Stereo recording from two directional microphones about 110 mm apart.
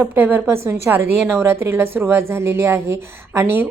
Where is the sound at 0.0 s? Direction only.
15° right (ahead or behind).